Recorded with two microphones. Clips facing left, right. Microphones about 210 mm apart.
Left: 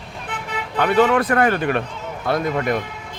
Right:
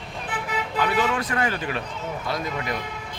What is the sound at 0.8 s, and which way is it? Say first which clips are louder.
Speech: left 8 dB; 60° left (ahead or behind).